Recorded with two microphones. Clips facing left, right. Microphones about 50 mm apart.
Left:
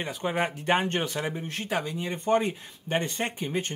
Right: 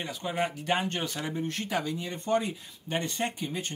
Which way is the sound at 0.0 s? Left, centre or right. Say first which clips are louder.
Left 3 dB; left.